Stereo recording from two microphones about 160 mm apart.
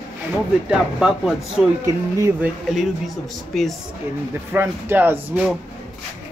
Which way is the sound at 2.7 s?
Centre (ahead or behind).